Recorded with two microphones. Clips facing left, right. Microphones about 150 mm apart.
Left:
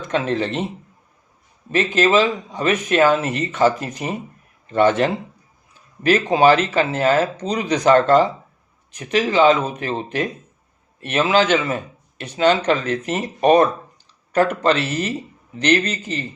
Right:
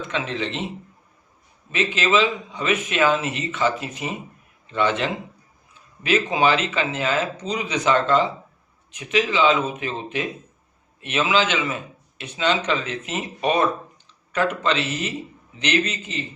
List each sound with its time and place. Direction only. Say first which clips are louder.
0.1 s speech: left 8 dB; 45° left (ahead or behind)
1.7 s speech: left 5 dB; 40° left (ahead or behind)